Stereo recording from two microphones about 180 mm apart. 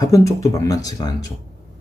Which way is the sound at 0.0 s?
15° left (ahead or behind).